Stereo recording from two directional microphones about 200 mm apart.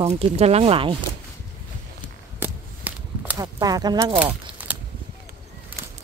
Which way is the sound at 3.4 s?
20° right (ahead or behind).